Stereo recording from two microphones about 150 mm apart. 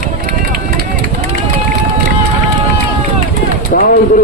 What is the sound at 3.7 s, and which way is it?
Speech, 75° left (ahead or behind).